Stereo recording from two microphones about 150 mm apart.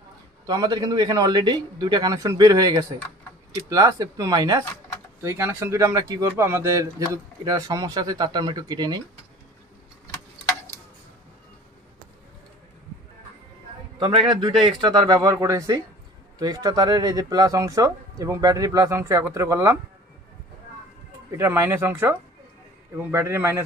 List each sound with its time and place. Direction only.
0.5 s speech: 25° right (ahead or behind)
13.9 s a man's voice: 35° right (ahead or behind)
21.4 s speech: 15° right (ahead or behind)